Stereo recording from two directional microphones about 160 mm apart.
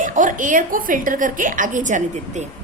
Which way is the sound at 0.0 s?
55° right (ahead or behind).